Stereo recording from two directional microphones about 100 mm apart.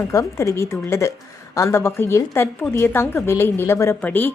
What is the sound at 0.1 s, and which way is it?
A woman's voice, 30° left (ahead or behind).